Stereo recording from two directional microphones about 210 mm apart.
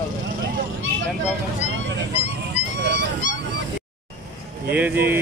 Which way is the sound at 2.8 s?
55° right (ahead or behind).